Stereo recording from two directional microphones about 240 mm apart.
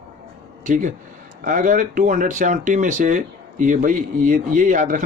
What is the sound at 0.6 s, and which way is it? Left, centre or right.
Speech, right.